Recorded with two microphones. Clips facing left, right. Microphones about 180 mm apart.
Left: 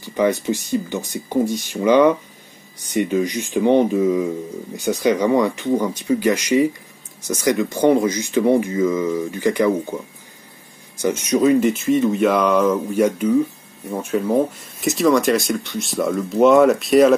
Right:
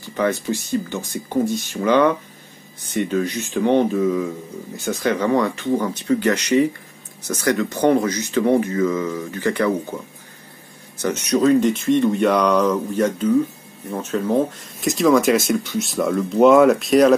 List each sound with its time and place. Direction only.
0.0 s speech: 15° left (ahead or behind)
11.0 s speech: 10° left (ahead or behind)